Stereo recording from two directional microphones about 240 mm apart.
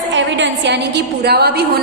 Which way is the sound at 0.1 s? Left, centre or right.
Right.